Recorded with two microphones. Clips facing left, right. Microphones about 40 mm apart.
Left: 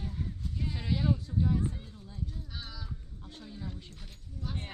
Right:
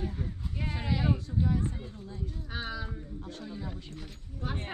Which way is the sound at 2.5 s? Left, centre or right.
Right.